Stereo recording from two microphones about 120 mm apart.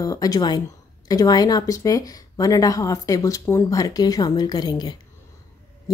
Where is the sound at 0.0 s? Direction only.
30° left (ahead or behind).